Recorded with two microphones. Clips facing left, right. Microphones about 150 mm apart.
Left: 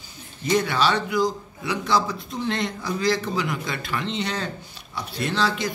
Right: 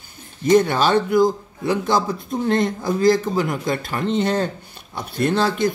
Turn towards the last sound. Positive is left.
turn(degrees=-50)  # may be behind; listen again after turning